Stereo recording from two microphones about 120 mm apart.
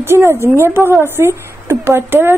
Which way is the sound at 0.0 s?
20° right (ahead or behind).